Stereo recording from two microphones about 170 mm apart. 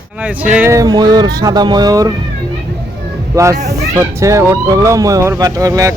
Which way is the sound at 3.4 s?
20° right (ahead or behind).